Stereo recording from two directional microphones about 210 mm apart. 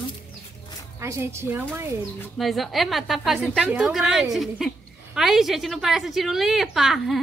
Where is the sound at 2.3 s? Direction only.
Centre (ahead or behind).